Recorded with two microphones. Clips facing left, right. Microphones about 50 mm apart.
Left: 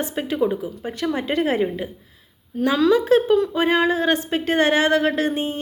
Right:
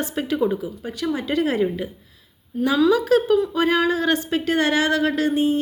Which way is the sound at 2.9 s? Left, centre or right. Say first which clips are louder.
Left 1 dB; left.